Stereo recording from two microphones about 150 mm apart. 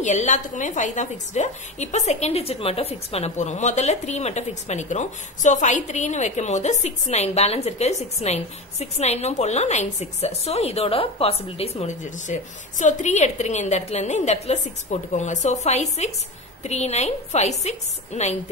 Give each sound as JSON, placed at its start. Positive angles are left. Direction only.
{"t": 0.0, "sound": "a woman's voice", "side_deg": 50}